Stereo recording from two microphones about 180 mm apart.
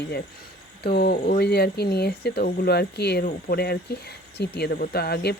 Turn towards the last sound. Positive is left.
turn(degrees=60)  # may be behind; listen again after turning